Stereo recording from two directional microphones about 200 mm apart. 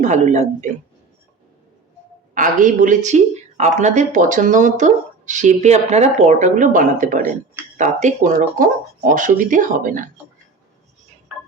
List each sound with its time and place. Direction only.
0.0 s speech: 35° right (ahead or behind)
2.3 s speech: 40° right (ahead or behind)
11.3 s music: 5° right (ahead or behind)